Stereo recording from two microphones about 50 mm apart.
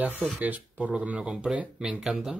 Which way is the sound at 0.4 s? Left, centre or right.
Right.